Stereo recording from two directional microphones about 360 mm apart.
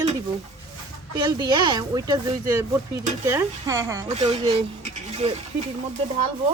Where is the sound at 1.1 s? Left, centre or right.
Centre.